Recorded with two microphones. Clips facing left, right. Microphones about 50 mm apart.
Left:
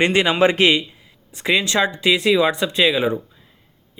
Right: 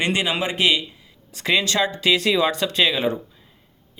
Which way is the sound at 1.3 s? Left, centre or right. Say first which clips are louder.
Left 2 dB; left.